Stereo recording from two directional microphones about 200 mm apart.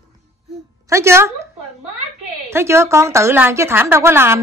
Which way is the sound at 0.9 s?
15° right (ahead or behind).